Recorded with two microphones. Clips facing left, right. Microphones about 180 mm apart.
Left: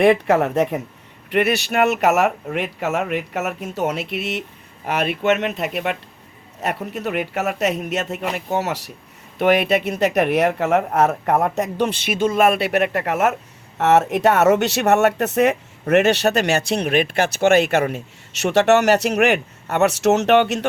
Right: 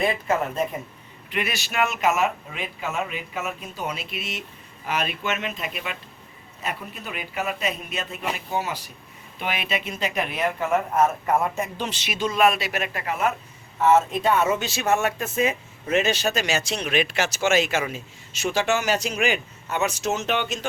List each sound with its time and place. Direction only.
0.0 s speech: 75° left (ahead or behind)
1.3 s speech: 65° left (ahead or behind)
9.4 s speech: 65° left (ahead or behind)
11.8 s speech: 55° left (ahead or behind)